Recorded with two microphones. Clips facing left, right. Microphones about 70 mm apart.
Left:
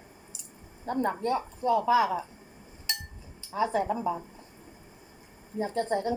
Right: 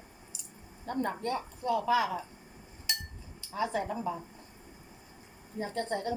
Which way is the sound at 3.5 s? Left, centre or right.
Left.